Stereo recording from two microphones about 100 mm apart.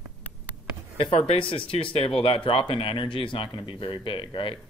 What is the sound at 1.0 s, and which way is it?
Speech, 70° left (ahead or behind).